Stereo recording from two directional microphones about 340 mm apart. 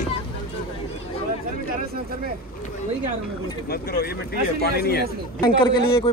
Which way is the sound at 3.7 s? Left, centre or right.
Left.